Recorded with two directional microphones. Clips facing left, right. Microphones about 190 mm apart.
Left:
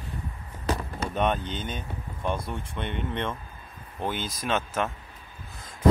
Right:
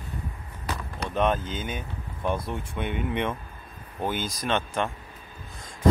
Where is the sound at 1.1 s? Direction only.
Centre (ahead or behind).